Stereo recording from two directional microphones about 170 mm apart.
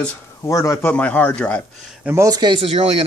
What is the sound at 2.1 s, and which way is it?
Speech, 20° right (ahead or behind).